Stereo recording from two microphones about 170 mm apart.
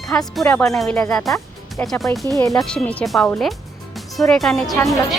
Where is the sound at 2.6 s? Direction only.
5° left (ahead or behind).